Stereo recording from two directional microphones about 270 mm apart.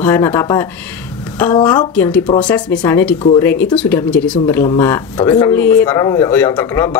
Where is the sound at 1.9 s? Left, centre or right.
Centre.